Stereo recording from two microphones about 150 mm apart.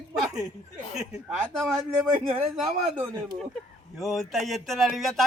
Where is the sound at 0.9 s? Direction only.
5° right (ahead or behind).